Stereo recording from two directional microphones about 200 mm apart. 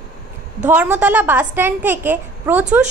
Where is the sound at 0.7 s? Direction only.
5° right (ahead or behind).